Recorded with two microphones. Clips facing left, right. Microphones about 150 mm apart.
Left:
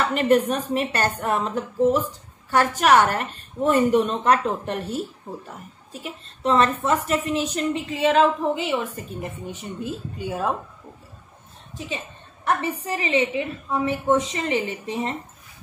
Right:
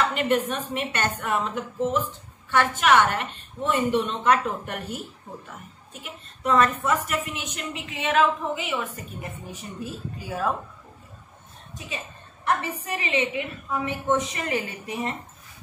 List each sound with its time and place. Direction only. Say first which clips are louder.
0.1 s a woman's voice: left 5 dB; 40° left (ahead or behind)
4.5 s a woman's voice: left 4 dB; 30° left (ahead or behind)
6.0 s a woman's voice: left 3 dB; 30° left (ahead or behind)
12.6 s a woman's voice: left 4 dB; 30° left (ahead or behind)